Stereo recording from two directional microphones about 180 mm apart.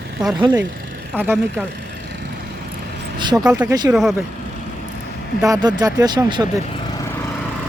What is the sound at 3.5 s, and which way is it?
Speech, 10° right (ahead or behind).